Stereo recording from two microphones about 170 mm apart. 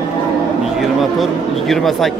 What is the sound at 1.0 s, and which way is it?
Speech, centre (ahead or behind).